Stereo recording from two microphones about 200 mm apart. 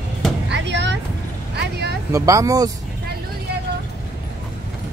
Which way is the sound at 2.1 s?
15° right (ahead or behind).